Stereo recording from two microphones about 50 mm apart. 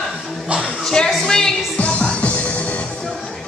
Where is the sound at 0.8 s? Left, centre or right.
Centre.